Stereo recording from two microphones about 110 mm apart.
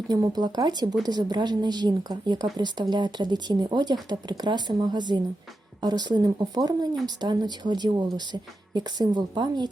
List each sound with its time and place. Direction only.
0.1 s speech: 40° right (ahead or behind)